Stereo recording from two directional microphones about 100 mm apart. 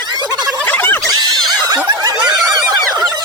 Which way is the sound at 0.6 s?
20° left (ahead or behind).